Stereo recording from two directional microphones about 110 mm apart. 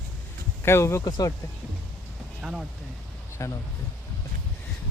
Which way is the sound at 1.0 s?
35° left (ahead or behind).